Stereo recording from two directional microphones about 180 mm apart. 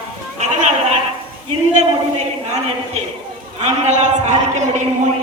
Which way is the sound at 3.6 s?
40° right (ahead or behind).